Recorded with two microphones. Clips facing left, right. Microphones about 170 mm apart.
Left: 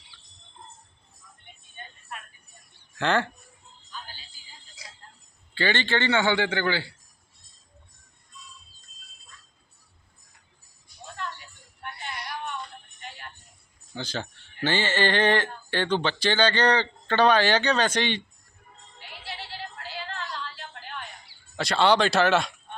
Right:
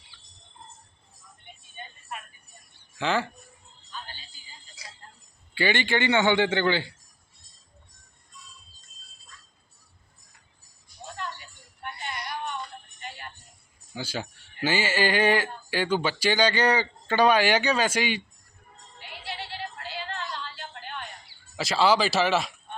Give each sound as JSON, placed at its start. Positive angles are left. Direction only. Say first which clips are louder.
{"t": 3.0, "sound": "speech", "louder": "left 2 dB", "side_deg": 0}
{"t": 5.5, "sound": "a man's voice", "louder": "right 1 dB", "side_deg": -10}
{"t": 11.8, "sound": "music", "louder": "right 1 dB", "side_deg": 0}
{"t": 13.9, "sound": "speech", "louder": "even", "side_deg": -10}
{"t": 19.3, "sound": "synthetic singing", "louder": "right 2 dB", "side_deg": 0}
{"t": 21.5, "sound": "speech", "louder": "left 1 dB", "side_deg": 0}